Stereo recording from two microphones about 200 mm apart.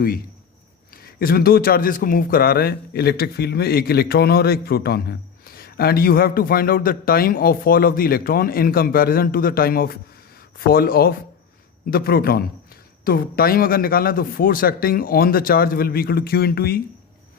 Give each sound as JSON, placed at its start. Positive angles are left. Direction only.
{"t": 1.2, "sound": "a man's voice", "side_deg": 50}